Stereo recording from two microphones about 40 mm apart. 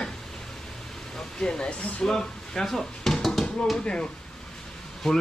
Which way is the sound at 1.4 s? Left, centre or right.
Left.